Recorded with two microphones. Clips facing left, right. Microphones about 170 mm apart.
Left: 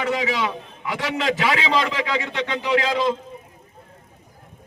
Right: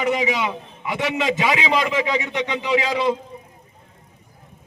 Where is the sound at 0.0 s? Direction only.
15° right (ahead or behind).